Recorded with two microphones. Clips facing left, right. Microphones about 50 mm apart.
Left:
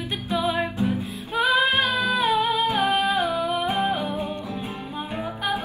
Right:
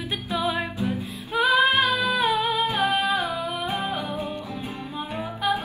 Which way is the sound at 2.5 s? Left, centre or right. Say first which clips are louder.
Left 1 dB; centre.